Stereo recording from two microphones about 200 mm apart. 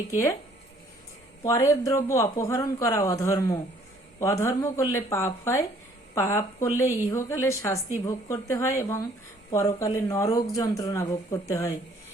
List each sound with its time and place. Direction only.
0.1 s a woman's voice: 15° left (ahead or behind)
1.5 s a woman's voice: 15° left (ahead or behind)